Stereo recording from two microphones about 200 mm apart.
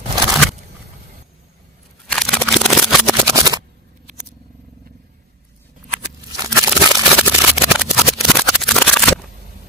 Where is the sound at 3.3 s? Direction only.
15° right (ahead or behind).